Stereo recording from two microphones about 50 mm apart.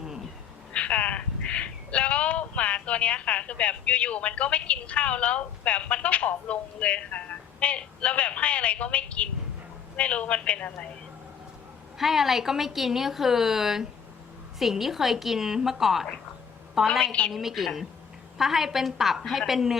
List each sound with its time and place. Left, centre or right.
0.0 s a sound: centre
0.7 s a woman's voice: left
11.9 s a woman's voice: centre
17.0 s a woman's voice: left
17.3 s a woman's voice: centre